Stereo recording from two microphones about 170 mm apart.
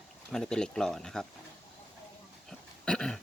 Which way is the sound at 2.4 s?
5° left (ahead or behind).